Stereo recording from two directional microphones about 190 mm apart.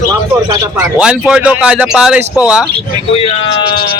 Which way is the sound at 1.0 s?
5° right (ahead or behind).